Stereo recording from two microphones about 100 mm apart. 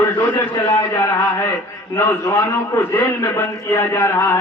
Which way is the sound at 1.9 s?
25° left (ahead or behind).